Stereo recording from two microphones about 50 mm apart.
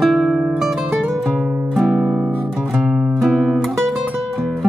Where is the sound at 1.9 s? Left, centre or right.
Centre.